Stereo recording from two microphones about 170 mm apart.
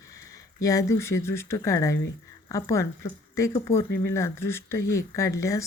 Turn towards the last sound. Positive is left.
turn(degrees=20)  # may be behind; listen again after turning